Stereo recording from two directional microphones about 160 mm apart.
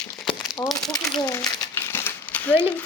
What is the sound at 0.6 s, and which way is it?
A child's voice, 25° left (ahead or behind).